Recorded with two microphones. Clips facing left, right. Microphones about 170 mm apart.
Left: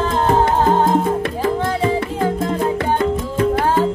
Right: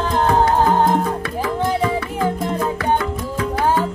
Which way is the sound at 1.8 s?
25° left (ahead or behind).